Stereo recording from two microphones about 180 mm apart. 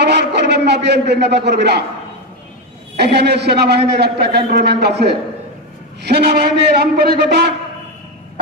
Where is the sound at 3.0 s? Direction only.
70° right (ahead or behind).